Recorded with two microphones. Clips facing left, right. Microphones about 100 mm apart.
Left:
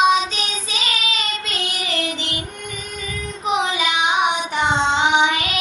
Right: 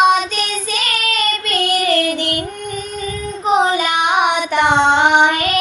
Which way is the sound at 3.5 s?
40° right (ahead or behind).